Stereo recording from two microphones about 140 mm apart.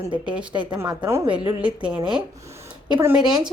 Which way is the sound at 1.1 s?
20° right (ahead or behind).